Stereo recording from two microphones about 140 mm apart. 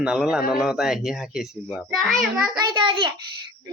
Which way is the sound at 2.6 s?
35° right (ahead or behind).